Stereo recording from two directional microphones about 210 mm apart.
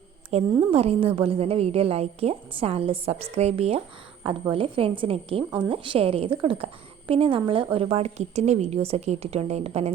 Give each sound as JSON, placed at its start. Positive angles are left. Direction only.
{"t": 0.3, "sound": "a woman's voice", "side_deg": -30}